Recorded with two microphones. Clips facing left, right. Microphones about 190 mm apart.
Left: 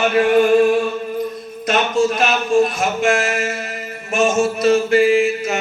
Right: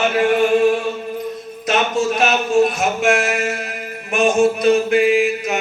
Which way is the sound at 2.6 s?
Centre (ahead or behind).